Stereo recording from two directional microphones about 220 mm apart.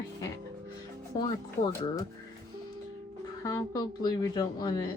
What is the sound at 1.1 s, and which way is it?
Speech, 20° left (ahead or behind).